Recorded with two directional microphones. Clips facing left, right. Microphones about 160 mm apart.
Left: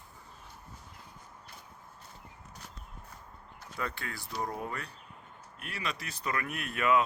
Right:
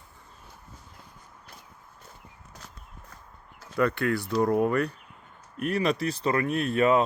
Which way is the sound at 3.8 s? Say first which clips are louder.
Right 14 dB; 65° right (ahead or behind).